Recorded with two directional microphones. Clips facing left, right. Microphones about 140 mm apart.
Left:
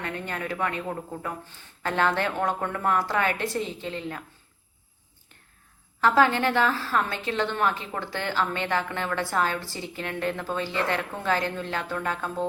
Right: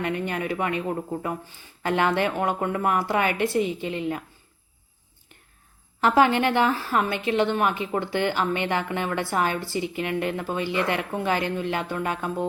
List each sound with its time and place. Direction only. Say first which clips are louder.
0.0 s a woman's voice: right 5 dB; 15° right (ahead or behind)
6.0 s a woman's voice: right 2 dB; 15° right (ahead or behind)